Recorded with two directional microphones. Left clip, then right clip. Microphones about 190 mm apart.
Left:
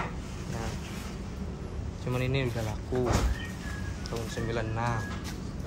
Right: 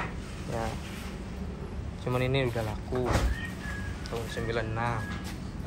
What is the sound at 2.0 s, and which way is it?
Speech, 15° left (ahead or behind).